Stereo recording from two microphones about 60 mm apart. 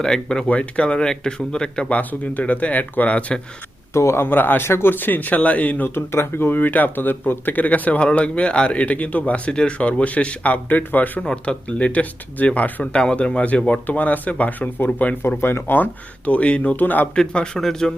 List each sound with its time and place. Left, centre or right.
0.0 s speech: centre
3.9 s a man's voice: left
5.9 s speech: left
11.2 s speech: centre
15.4 s a man's voice: left
17.2 s speech: centre